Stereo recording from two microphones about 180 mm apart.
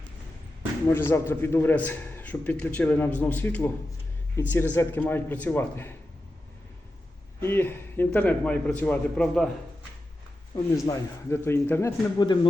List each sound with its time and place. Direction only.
0.9 s a man's voice: 15° left (ahead or behind)
7.4 s a man's voice: 10° left (ahead or behind)
10.8 s a man's voice: 15° left (ahead or behind)